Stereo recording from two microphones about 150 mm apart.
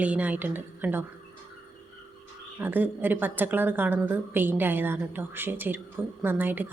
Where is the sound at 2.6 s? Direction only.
10° right (ahead or behind).